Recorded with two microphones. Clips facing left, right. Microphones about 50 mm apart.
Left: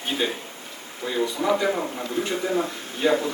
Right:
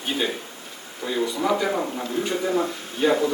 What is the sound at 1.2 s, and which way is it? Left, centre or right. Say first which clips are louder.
Speech: even; centre.